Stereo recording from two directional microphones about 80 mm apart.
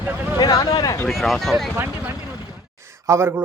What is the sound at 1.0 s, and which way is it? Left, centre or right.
Speech, centre.